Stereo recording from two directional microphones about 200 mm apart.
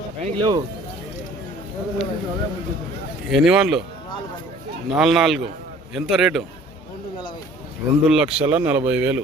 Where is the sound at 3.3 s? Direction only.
5° right (ahead or behind).